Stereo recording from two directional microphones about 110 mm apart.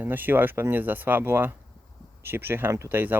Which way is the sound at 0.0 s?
15° right (ahead or behind).